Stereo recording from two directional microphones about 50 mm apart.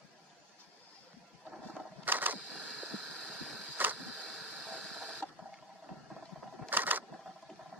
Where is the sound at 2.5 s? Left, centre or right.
Centre.